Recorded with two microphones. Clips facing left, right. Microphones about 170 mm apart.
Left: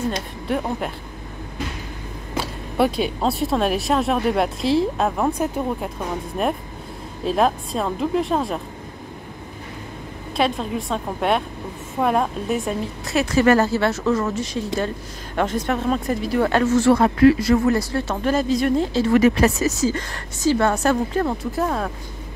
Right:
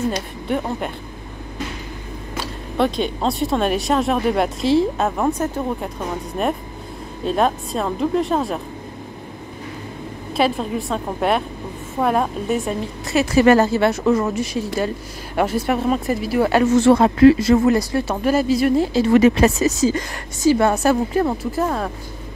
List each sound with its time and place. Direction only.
0.5 s speech: centre (ahead or behind)
2.8 s speech: 5° left (ahead or behind)
10.3 s speech: centre (ahead or behind)
13.5 s speech: 20° right (ahead or behind)
16.7 s speech: 20° right (ahead or behind); by 19.0 s 5° right (ahead or behind)
19.0 s speech: 25° right (ahead or behind); by 21.9 s centre (ahead or behind)